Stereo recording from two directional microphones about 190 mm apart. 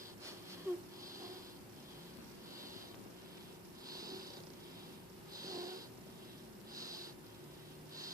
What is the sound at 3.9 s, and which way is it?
Sniff, 20° right (ahead or behind).